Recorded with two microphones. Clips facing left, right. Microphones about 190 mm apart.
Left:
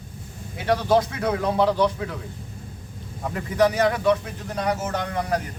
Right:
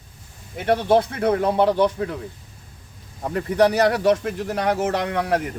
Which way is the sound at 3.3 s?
60° right (ahead or behind).